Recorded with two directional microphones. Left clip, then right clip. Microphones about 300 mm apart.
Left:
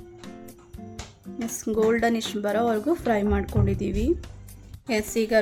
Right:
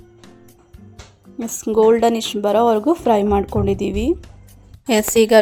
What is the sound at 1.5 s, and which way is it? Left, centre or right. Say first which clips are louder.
A woman's voice: right 9 dB; centre.